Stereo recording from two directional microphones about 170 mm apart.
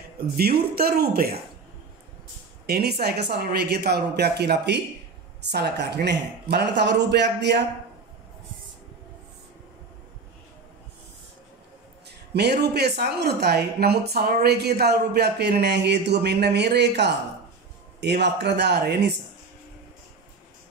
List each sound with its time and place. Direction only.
0.4 s speech: 65° right (ahead or behind)
2.6 s a man's voice: 70° right (ahead or behind)
12.4 s speech: 75° right (ahead or behind)